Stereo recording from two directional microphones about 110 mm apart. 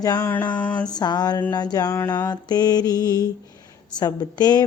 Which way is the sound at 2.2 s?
40° left (ahead or behind).